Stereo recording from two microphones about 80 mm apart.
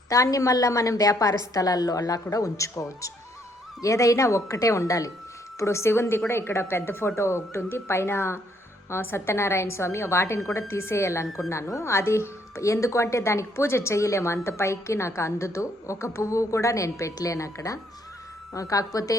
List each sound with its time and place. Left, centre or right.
0.1 s a woman's voice: left
5.5 s a woman's voice: left